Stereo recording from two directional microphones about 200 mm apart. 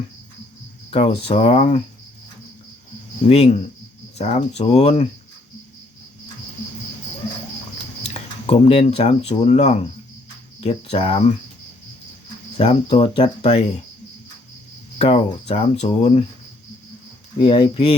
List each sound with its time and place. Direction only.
0.9 s speech: 30° left (ahead or behind)
3.2 s speech: 30° left (ahead or behind)
8.0 s speech: 30° left (ahead or behind)
12.5 s speech: 25° left (ahead or behind)
14.9 s speech: 30° left (ahead or behind)
17.4 s speech: 25° left (ahead or behind)